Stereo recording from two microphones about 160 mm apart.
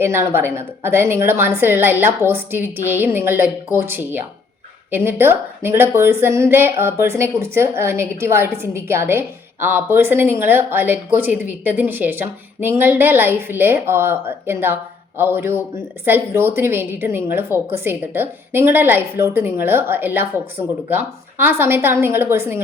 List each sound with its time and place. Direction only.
0.0 s a woman's voice: 15° right (ahead or behind)